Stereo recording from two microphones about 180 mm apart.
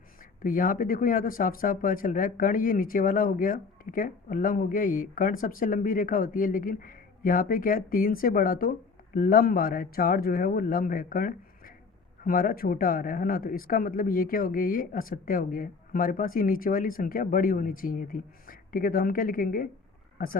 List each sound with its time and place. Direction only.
0.4 s speech: 50° left (ahead or behind)